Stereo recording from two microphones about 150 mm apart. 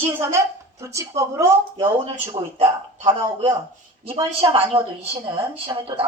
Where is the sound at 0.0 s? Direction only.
20° right (ahead or behind).